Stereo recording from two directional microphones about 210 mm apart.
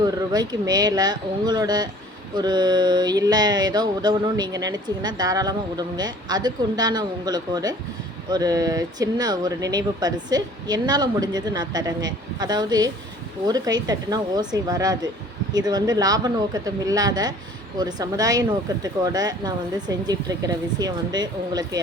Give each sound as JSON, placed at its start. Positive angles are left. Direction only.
{"t": 0.0, "sound": "speech", "side_deg": -20}